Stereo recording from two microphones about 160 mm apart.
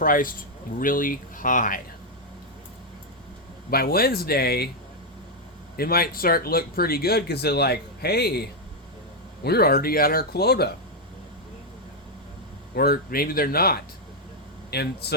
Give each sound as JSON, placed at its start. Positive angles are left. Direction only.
{"t": 0.0, "sound": "speech", "side_deg": 60}
{"t": 3.7, "sound": "speech", "side_deg": 70}
{"t": 5.7, "sound": "speech", "side_deg": 70}
{"t": 12.7, "sound": "speech", "side_deg": 75}
{"t": 14.7, "sound": "a man's voice", "side_deg": 90}